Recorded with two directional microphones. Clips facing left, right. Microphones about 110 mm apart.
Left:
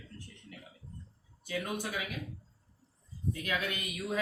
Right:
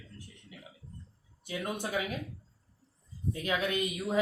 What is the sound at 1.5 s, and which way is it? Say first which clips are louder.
Speech: right 1 dB; 25° right (ahead or behind).